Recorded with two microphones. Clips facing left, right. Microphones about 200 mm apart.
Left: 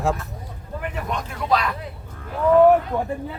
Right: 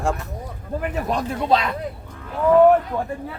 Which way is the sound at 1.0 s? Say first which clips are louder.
Right 5 dB; 30° right (ahead or behind).